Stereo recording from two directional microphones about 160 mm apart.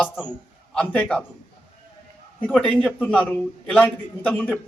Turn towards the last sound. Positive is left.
turn(degrees=10)  # may be behind; listen again after turning